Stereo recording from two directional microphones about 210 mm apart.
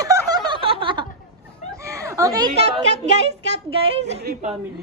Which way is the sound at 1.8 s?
15° right (ahead or behind).